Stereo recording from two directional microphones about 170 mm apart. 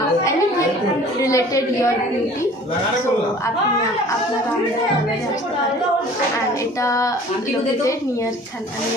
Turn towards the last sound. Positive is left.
turn(degrees=20)  # may be behind; listen again after turning